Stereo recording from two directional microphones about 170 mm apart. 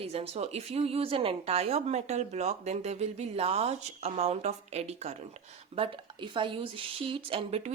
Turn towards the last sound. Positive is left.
turn(degrees=-35)  # may be behind; listen again after turning